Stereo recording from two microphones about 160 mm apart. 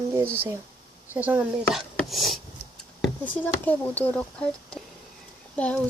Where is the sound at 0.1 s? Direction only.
15° right (ahead or behind).